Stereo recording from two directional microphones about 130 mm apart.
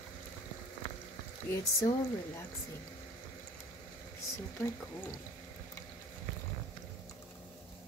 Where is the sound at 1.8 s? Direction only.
25° left (ahead or behind).